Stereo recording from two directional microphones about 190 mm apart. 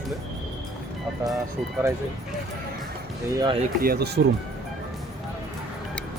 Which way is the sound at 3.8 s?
55° right (ahead or behind).